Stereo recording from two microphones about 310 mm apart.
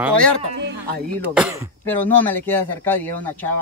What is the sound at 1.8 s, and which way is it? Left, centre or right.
Speech, centre.